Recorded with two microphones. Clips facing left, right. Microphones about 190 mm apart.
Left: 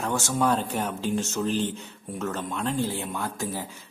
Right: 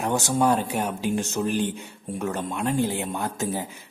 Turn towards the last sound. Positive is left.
turn(degrees=-20)  # may be behind; listen again after turning